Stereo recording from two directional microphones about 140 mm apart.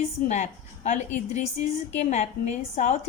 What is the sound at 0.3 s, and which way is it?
A woman's voice, 55° left (ahead or behind).